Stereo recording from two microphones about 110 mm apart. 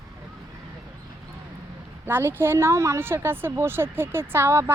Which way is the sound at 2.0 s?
20° right (ahead or behind).